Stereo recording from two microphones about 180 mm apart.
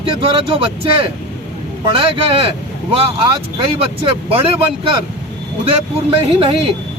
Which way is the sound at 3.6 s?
30° right (ahead or behind).